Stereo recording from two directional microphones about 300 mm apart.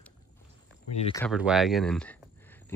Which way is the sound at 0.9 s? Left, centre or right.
Centre.